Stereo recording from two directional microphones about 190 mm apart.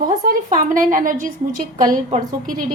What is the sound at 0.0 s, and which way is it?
A woman's voice, 45° right (ahead or behind).